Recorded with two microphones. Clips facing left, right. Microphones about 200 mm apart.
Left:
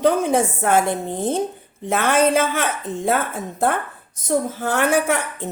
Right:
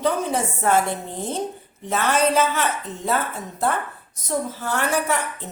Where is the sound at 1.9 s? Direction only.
55° left (ahead or behind).